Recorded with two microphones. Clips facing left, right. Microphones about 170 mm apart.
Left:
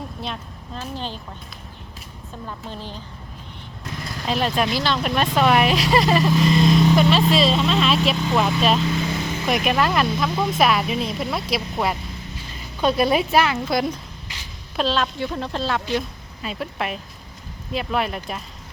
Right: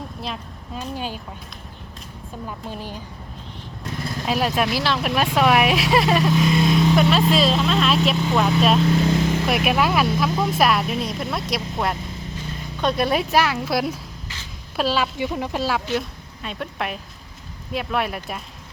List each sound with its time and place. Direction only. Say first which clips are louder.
0.2 s a sound: even; centre (ahead or behind)
0.8 s speech: right 2 dB; 10° right (ahead or behind)
2.5 s speech: right 1 dB; 10° right (ahead or behind)
4.3 s speech: even; 5° right (ahead or behind)
16.0 s speech: even; centre (ahead or behind)